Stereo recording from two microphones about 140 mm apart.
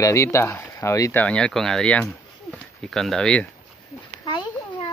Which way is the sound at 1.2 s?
5° left (ahead or behind).